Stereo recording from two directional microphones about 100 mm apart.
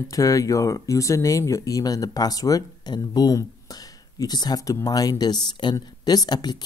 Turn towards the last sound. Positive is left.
turn(degrees=45)  # may be behind; listen again after turning